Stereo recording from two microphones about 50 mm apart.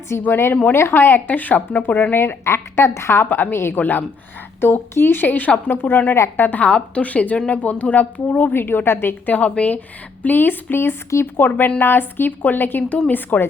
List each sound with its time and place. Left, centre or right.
0.3 s a woman's voice: left
2.1 s a woman's voice: left
3.2 s a woman's voice: left
3.8 s a woman's voice: left
4.6 s a woman's voice: left
6.6 s a woman's voice: left
8.5 s a woman's voice: left
9.3 s a woman's voice: left
10.2 s a woman's voice: left